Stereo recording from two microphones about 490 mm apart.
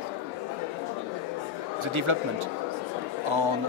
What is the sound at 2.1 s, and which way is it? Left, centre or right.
Speech, right.